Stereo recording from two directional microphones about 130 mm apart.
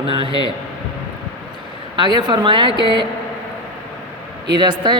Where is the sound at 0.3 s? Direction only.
35° left (ahead or behind).